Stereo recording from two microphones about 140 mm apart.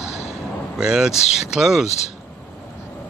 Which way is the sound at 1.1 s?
50° left (ahead or behind).